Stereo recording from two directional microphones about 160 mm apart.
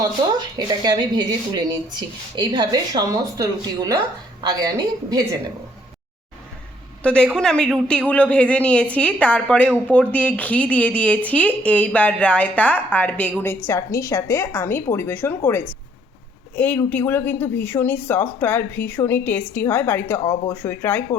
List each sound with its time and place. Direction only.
0.0 s a woman's voice: 25° right (ahead or behind)
7.0 s a woman's voice: 5° left (ahead or behind)